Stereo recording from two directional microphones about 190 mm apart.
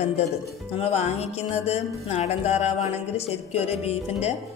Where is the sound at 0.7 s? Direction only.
35° left (ahead or behind).